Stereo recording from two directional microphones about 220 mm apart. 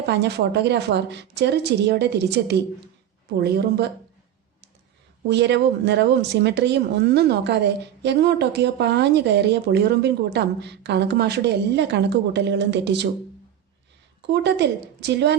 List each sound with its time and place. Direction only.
0.0 s speech: 50° right (ahead or behind)
5.3 s speech: 50° right (ahead or behind)
14.2 s speech: 50° right (ahead or behind)